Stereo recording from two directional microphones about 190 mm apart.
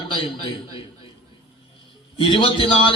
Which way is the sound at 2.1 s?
25° left (ahead or behind).